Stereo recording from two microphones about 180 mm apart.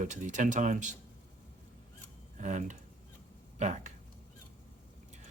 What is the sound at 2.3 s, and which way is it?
Speech, 45° right (ahead or behind).